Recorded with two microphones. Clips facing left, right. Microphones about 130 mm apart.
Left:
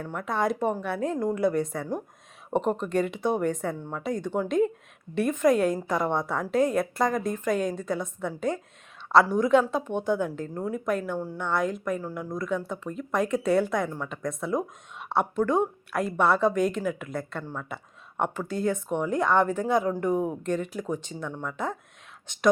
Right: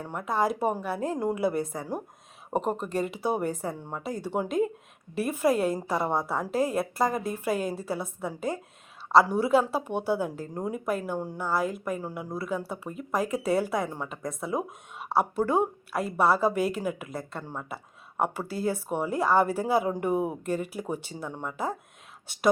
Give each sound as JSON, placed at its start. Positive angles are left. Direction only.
{"t": 0.0, "sound": "a woman's voice", "side_deg": -10}
{"t": 17.4, "sound": "speech", "side_deg": -15}
{"t": 18.2, "sound": "speech", "side_deg": -5}